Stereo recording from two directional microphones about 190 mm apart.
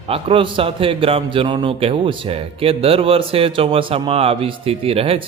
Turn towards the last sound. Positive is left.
turn(degrees=-30)  # may be behind; listen again after turning